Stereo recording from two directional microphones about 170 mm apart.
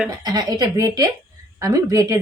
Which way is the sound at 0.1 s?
25° right (ahead or behind).